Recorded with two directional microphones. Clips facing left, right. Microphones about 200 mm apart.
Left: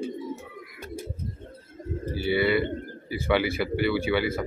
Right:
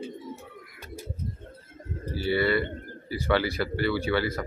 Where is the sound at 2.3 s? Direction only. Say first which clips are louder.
Left 2 dB; 5° left (ahead or behind).